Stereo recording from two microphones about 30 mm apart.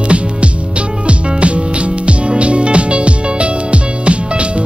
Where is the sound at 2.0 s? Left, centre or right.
Right.